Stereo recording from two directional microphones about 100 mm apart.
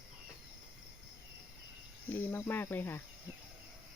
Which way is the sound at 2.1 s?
25° left (ahead or behind).